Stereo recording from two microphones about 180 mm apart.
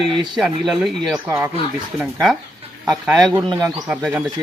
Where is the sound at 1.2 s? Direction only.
15° right (ahead or behind).